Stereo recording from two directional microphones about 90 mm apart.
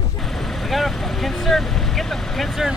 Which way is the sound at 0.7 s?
Centre (ahead or behind).